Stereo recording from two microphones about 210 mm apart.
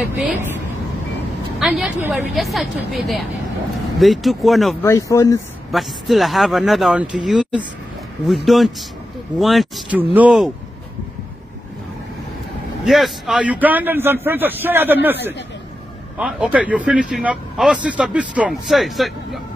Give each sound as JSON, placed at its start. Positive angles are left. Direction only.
{"t": 0.0, "sound": "a man's voice", "side_deg": -5}
{"t": 1.6, "sound": "speech", "side_deg": 0}
{"t": 4.8, "sound": "speech", "side_deg": 15}
{"t": 5.7, "sound": "speech", "side_deg": 0}
{"t": 12.8, "sound": "a man's voice", "side_deg": 0}